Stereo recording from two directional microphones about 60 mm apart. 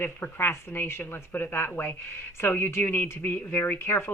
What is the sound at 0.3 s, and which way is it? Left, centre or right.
Speech, left.